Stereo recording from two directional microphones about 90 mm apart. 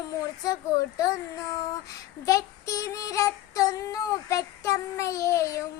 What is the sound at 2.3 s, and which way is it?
Child singing, 35° left (ahead or behind).